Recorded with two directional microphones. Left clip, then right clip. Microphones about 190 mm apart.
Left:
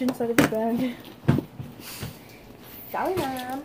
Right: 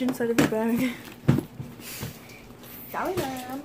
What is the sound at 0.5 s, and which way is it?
Speech, 45° right (ahead or behind).